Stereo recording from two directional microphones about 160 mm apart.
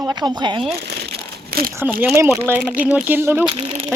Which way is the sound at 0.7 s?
90° right.